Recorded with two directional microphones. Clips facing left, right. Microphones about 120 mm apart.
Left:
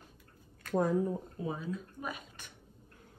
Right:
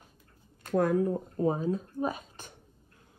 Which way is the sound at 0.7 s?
75° right (ahead or behind).